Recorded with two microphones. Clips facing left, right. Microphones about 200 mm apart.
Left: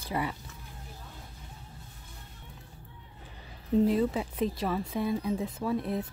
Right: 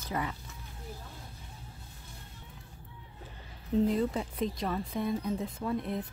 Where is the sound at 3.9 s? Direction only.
5° left (ahead or behind).